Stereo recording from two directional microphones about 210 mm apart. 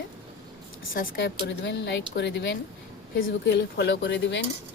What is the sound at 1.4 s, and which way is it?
Speech, 60° left (ahead or behind).